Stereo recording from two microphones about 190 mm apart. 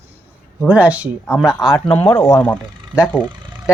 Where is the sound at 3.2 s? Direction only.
25° right (ahead or behind).